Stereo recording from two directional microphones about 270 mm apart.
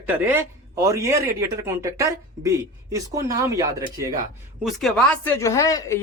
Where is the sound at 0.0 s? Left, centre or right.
Centre.